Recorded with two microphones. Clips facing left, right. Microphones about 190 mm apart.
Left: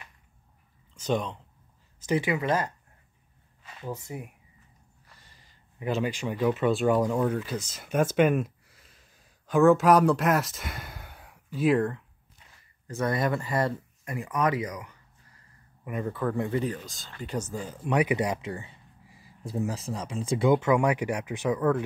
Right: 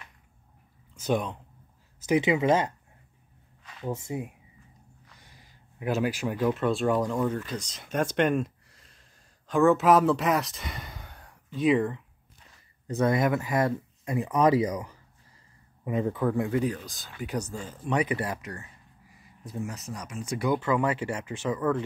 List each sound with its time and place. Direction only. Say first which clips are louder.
0.9 s speech: right 1 dB; 10° right (ahead or behind)
3.8 s speech: right 4 dB; 25° right (ahead or behind)
5.1 s speech: even; 15° right (ahead or behind)
12.8 s speech: right 3 dB; 15° right (ahead or behind); by 16.8 s centre (ahead or behind)
16.8 s speech: right 2 dB; 15° right (ahead or behind)
17.4 s speech: left 1 dB; 5° left (ahead or behind)